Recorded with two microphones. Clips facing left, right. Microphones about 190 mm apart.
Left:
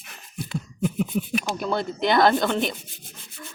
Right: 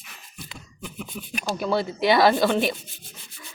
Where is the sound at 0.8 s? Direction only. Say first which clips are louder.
Left 12 dB; 45° left (ahead or behind).